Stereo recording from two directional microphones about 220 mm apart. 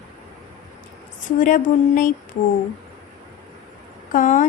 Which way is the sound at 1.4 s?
35° left (ahead or behind).